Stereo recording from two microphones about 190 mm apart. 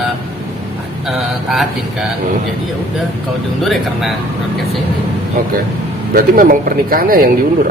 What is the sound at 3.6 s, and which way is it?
Speech, centre (ahead or behind).